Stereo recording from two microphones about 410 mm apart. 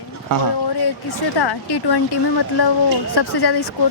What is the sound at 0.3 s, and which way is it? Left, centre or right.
Speech, right.